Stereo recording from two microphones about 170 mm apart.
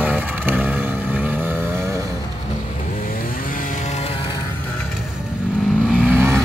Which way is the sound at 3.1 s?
50° left (ahead or behind).